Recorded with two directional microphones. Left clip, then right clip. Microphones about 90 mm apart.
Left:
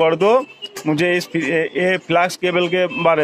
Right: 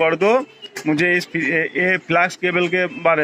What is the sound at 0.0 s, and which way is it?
Speech, 20° left (ahead or behind).